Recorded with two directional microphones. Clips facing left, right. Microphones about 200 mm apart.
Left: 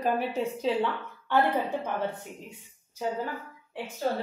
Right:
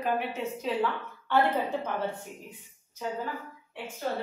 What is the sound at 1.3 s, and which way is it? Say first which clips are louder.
Speech: even; 15° left (ahead or behind).